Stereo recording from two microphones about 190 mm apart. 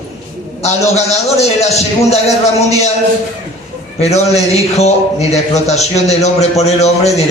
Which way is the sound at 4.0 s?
35° left (ahead or behind).